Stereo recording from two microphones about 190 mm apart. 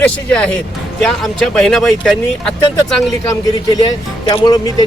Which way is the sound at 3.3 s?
20° left (ahead or behind).